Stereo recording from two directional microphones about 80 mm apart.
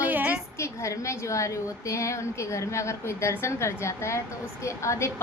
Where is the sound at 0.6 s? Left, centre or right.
Left.